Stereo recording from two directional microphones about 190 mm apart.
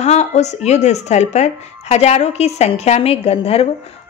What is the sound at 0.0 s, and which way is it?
A woman's voice, 35° left (ahead or behind).